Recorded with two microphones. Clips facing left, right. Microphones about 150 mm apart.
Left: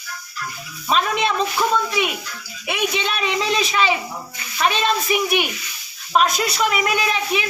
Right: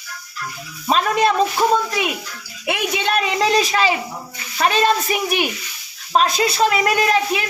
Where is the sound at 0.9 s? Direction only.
40° right (ahead or behind).